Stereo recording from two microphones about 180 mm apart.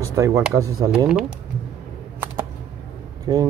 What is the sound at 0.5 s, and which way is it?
Speech, 20° right (ahead or behind).